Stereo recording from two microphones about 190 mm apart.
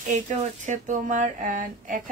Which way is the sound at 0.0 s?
40° right (ahead or behind).